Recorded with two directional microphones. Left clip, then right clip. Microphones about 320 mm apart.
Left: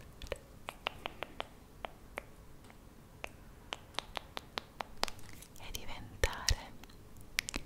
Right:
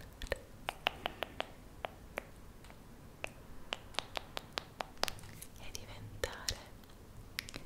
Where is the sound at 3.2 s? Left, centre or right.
Centre.